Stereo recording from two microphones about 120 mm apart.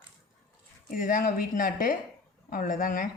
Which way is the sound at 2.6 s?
90° left.